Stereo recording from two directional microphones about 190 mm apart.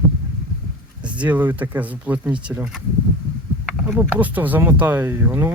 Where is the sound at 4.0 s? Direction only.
10° right (ahead or behind).